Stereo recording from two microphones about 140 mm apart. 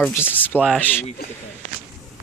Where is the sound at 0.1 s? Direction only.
15° left (ahead or behind).